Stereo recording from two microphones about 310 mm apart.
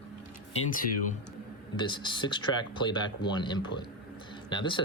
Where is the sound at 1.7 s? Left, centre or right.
Centre.